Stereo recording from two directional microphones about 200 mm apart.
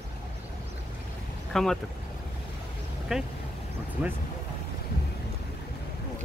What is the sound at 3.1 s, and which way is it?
Speech, 5° right (ahead or behind).